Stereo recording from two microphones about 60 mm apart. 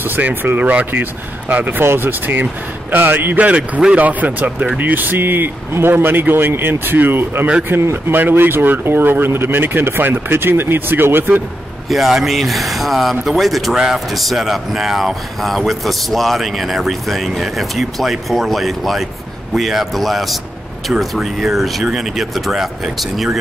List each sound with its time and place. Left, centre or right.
0.0 s speech: right
3.3 s speech: right
11.9 s speech: centre